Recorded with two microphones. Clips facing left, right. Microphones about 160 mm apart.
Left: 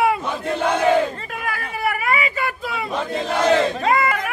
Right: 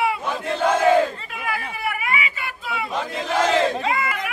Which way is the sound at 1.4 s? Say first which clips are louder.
Left 2 dB; 50° left (ahead or behind).